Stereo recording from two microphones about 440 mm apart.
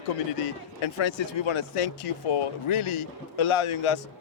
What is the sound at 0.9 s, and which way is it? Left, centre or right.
Speech, left.